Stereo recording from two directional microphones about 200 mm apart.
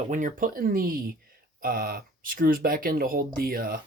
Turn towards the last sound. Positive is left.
turn(degrees=-45)  # may be behind; listen again after turning